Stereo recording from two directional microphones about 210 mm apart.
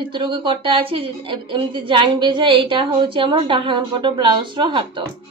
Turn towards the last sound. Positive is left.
turn(degrees=-25)  # may be behind; listen again after turning